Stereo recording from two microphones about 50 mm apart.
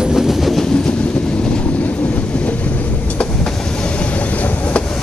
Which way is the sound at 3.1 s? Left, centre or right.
Left.